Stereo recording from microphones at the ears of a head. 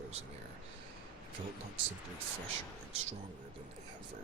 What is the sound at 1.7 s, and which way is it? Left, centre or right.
Speech, right.